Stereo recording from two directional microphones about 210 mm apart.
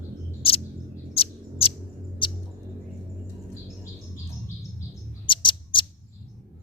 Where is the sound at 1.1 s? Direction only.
25° left (ahead or behind).